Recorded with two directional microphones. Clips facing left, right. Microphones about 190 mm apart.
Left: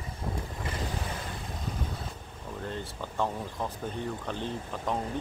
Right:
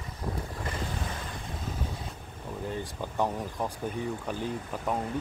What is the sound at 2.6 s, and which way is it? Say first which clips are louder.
Speech: right 3 dB; 15° right (ahead or behind).